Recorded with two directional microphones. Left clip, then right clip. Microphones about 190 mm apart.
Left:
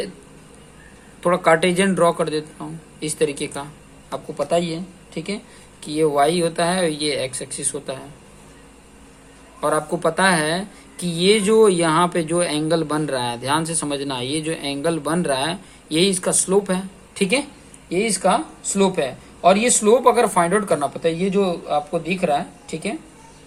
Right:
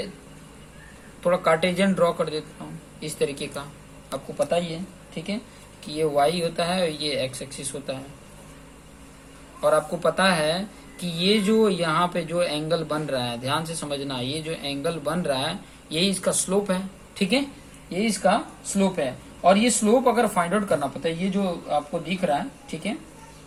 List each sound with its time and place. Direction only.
1.2 s speech: 45° left (ahead or behind)
2.6 s a sound: 45° left (ahead or behind)
3.0 s speech: 45° left (ahead or behind)
9.6 s speech: 45° left (ahead or behind)